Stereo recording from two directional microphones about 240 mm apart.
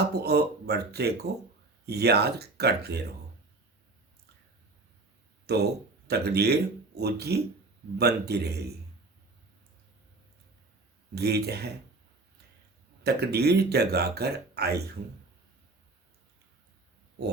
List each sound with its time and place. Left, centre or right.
0.2 s speech: right
5.5 s speech: right
11.1 s speech: right
13.0 s speech: right